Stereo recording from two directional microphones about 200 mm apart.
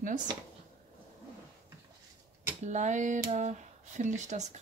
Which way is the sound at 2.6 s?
35° right (ahead or behind).